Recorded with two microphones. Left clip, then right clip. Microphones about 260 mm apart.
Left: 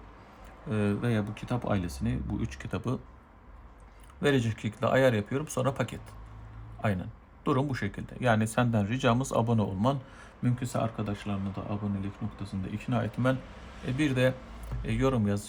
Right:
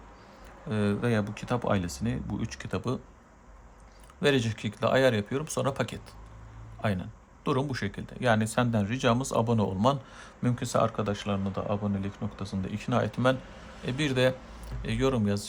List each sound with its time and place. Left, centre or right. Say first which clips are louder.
0.7 s speech: right 2 dB; centre
4.2 s speech: right 2 dB; centre